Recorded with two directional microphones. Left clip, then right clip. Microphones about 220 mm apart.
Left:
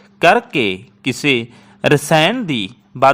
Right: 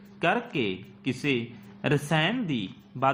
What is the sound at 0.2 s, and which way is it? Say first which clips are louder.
A man's voice: left 14 dB; 45° left (ahead or behind).